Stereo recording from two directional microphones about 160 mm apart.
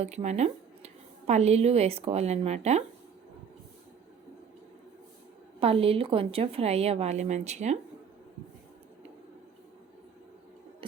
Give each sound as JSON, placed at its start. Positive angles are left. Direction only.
{"t": 0.0, "sound": "a woman's voice", "side_deg": -45}
{"t": 5.5, "sound": "a woman's voice", "side_deg": -35}